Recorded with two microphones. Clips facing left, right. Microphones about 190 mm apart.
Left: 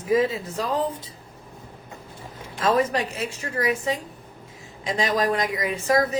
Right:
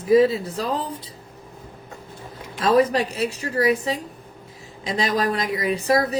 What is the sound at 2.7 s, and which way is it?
Speech, 35° right (ahead or behind).